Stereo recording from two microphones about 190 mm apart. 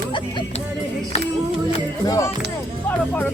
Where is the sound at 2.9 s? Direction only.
10° left (ahead or behind).